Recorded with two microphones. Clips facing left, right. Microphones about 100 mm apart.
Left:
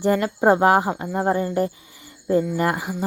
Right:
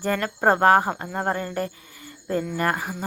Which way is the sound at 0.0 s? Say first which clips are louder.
Left 4 dB; 15° left (ahead or behind).